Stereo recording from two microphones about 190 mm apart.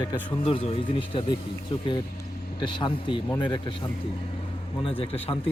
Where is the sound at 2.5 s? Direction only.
25° left (ahead or behind).